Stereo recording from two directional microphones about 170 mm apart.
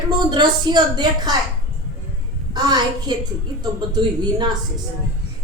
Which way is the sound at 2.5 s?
25° right (ahead or behind).